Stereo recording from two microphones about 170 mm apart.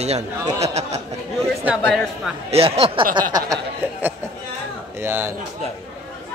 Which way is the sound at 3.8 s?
15° right (ahead or behind).